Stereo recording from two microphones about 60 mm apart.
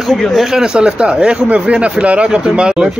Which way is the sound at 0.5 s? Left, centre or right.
Centre.